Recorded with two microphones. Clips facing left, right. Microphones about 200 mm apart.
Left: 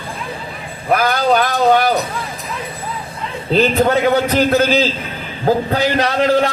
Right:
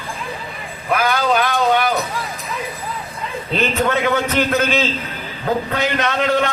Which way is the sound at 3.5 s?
35° left (ahead or behind).